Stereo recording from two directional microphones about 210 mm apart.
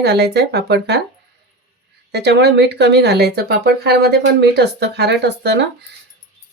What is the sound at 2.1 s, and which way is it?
Speech, 50° right (ahead or behind).